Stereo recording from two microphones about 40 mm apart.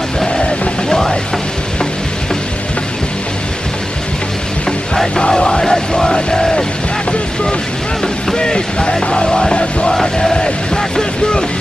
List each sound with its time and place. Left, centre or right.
0.8 s music: centre
4.6 s music: centre
8.4 s music: left
9.9 s music: centre